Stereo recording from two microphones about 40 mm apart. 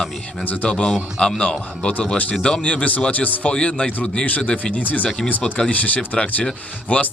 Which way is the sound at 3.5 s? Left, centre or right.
Left.